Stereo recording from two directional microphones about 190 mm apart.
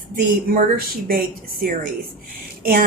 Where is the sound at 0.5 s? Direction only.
50° right (ahead or behind).